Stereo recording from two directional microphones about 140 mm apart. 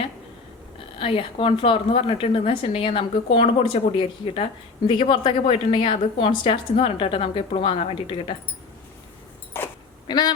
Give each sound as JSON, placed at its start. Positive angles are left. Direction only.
{"t": 0.9, "sound": "a woman's voice", "side_deg": 40}
{"t": 10.1, "sound": "a woman's voice", "side_deg": 30}